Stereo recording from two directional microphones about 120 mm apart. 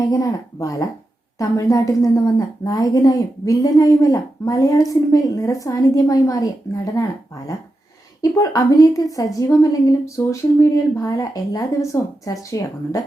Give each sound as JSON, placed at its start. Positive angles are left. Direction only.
{"t": 0.0, "sound": "a woman's voice", "side_deg": 30}
{"t": 8.2, "sound": "a woman's voice", "side_deg": 30}